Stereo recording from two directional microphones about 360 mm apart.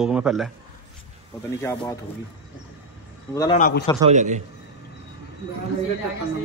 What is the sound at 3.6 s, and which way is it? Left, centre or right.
Speech, left.